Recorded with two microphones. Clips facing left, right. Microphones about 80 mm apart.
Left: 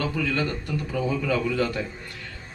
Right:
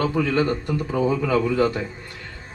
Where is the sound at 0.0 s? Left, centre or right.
Right.